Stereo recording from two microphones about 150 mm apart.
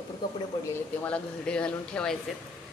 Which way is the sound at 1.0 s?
5° left (ahead or behind).